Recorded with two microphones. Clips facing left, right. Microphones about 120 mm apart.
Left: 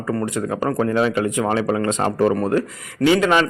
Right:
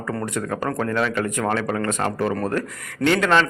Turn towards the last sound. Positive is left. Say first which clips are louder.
# left 2 dB
turn(degrees=10)  # may be behind; listen again after turning